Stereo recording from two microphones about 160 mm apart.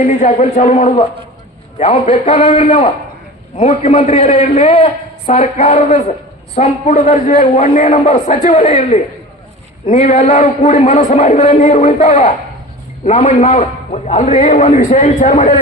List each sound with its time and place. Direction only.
0.0 s a man's voice: 50° left (ahead or behind)
1.8 s a man's voice: 40° left (ahead or behind)